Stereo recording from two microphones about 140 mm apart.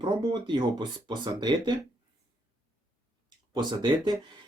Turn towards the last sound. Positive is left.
turn(degrees=-30)  # may be behind; listen again after turning